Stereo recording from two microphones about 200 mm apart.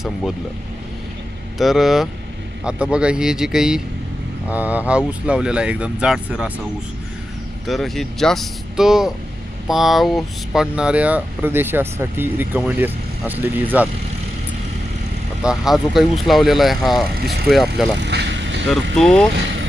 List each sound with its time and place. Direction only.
0.0 s speech: centre (ahead or behind)
1.5 s speech: centre (ahead or behind)
7.7 s speech: centre (ahead or behind)
15.4 s speech: centre (ahead or behind)
17.9 s vehicle: 60° right (ahead or behind)
18.9 s speech: centre (ahead or behind)